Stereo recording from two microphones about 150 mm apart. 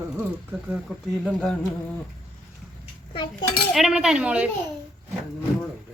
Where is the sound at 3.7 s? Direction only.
Centre (ahead or behind).